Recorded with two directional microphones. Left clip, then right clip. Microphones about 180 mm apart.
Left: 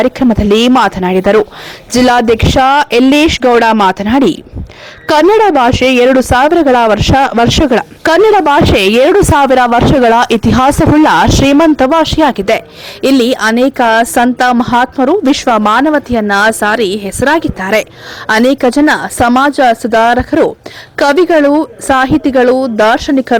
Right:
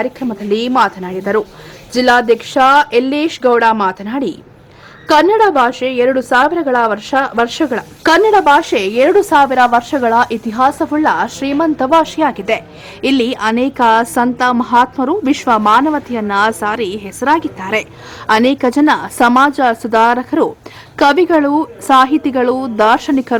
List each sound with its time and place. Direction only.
0.2 s a woman's voice: 35° left (ahead or behind); by 23.4 s 20° left (ahead or behind)